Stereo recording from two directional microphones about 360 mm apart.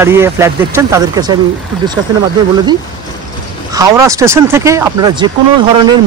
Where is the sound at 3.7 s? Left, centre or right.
Centre.